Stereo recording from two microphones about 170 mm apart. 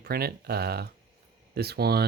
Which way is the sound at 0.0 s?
65° right (ahead or behind).